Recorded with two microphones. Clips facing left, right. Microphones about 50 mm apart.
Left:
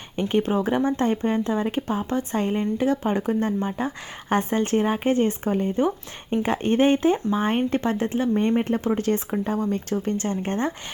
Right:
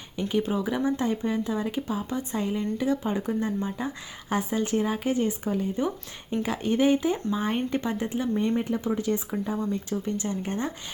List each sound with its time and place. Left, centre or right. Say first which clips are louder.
0.2 s speech: left 4 dB; left
4.3 s speech: left 4 dB; left
9.6 s speech: left 4 dB; left